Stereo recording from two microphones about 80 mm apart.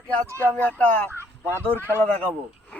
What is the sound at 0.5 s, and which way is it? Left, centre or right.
Speech, centre.